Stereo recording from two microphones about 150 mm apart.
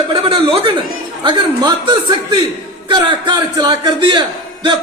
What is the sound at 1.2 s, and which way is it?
A man's voice, 30° right (ahead or behind).